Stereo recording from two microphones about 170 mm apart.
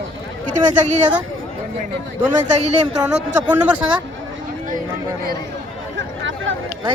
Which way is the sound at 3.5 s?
5° right (ahead or behind).